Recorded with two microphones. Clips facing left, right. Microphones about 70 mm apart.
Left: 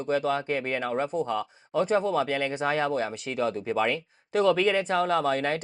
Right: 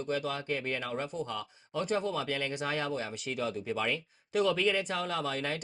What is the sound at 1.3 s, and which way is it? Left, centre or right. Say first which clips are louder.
Speech: left 9 dB; left.